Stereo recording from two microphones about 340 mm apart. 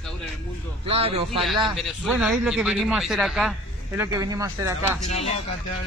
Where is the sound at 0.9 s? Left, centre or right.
Centre.